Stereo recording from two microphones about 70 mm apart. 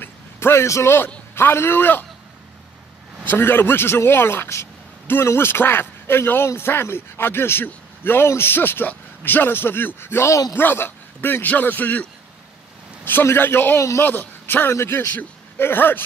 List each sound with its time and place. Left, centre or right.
0.0 s a sound: left
1.3 s speech: left
3.3 s speech: left
10.5 s a man's voice: left